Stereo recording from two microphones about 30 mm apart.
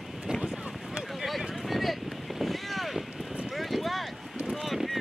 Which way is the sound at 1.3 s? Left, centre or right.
Centre.